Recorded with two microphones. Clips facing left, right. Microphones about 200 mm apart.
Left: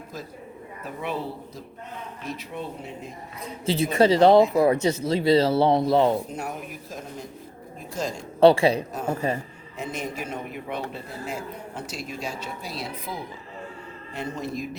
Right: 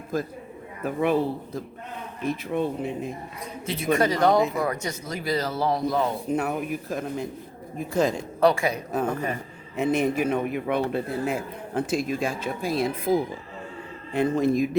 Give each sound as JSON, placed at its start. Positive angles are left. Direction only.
{"t": 0.8, "sound": "a man's voice", "side_deg": -55}
{"t": 3.9, "sound": "speech", "side_deg": 30}
{"t": 6.3, "sound": "a man's voice", "side_deg": -60}
{"t": 8.4, "sound": "speech", "side_deg": 30}
{"t": 9.7, "sound": "a man's voice", "side_deg": -60}